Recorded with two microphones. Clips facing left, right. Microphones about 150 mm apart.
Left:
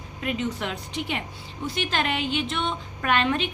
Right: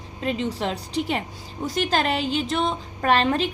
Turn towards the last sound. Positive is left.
turn(degrees=-35)  # may be behind; listen again after turning